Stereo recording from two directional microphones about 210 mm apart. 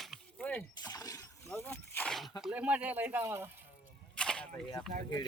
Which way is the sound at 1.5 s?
10° left (ahead or behind).